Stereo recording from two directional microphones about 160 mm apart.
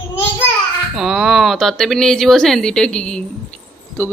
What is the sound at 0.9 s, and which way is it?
Speech, 5° right (ahead or behind).